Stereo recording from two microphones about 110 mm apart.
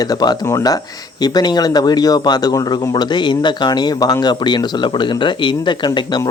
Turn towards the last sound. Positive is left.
turn(degrees=45)  # may be behind; listen again after turning